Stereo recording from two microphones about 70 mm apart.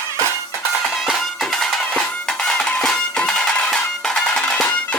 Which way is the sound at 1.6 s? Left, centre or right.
Centre.